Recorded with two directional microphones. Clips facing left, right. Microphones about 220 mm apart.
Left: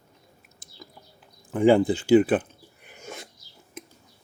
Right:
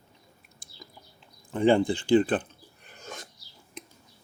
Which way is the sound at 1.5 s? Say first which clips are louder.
Left 3 dB; 5° left (ahead or behind).